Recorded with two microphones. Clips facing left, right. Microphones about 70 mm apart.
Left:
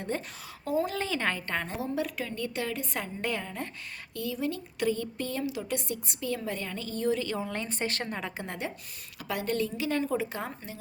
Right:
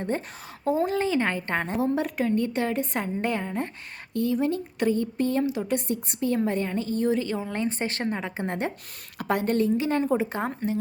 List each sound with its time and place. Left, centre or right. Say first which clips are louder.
0.6 s speech: right 6 dB; right
1.7 s a woman's voice: right 6 dB; right
8.4 s a woman's voice: right 7 dB; right